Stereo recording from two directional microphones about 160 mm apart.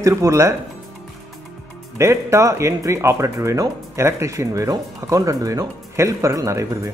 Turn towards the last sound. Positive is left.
turn(degrees=-20)  # may be behind; listen again after turning